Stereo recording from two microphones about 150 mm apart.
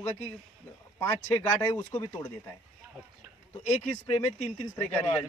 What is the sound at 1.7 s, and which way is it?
Speech, 20° left (ahead or behind).